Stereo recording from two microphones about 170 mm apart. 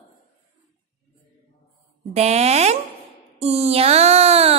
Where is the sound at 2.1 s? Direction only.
40° right (ahead or behind).